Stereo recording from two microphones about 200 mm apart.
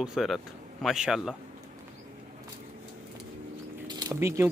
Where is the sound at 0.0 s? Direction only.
Centre (ahead or behind).